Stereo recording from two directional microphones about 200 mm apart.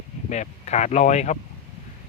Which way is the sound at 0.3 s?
35° left (ahead or behind).